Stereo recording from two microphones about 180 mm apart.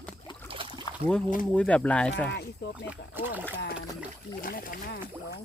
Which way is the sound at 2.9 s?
10° right (ahead or behind).